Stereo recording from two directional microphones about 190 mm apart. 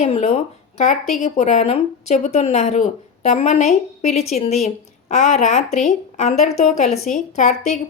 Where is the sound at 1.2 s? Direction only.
40° left (ahead or behind).